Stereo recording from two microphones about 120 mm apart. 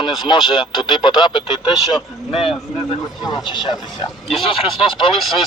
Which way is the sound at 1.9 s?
5° right (ahead or behind).